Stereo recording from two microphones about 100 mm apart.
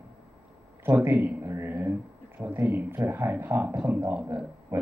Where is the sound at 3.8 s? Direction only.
10° right (ahead or behind).